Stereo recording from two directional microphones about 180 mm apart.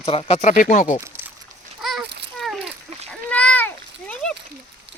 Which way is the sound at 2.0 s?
75° right (ahead or behind).